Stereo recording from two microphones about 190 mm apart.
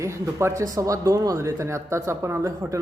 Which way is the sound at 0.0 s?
15° right (ahead or behind).